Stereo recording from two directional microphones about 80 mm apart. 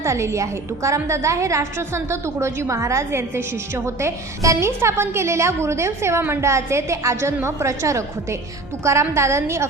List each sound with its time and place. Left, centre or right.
0.0 s a woman's voice: right